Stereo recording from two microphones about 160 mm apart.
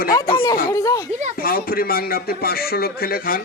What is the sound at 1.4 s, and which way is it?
A man's voice, 65° left (ahead or behind).